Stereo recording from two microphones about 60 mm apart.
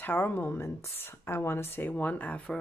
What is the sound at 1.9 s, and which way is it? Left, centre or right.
Speech, left.